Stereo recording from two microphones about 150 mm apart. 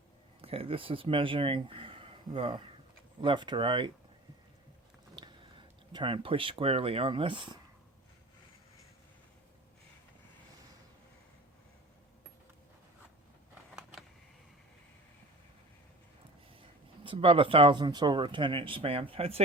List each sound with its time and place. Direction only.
0.4 s speech: 40° right (ahead or behind)
5.1 s speech: 30° right (ahead or behind)
17.0 s speech: 35° right (ahead or behind)